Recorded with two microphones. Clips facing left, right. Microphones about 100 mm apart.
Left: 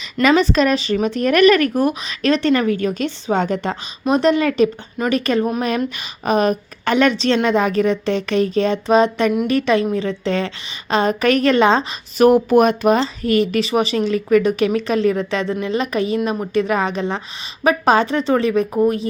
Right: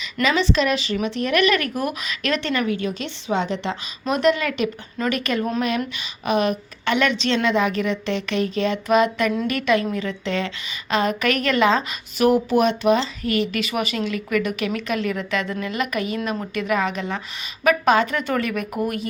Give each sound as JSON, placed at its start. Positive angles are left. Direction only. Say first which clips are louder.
{"t": 0.0, "sound": "speech", "louder": "left 6 dB", "side_deg": 45}
{"t": 4.1, "sound": "speech", "louder": "left 4 dB", "side_deg": 30}
{"t": 12.2, "sound": "speech", "louder": "left 5 dB", "side_deg": 45}
{"t": 16.6, "sound": "speech", "louder": "left 5 dB", "side_deg": 35}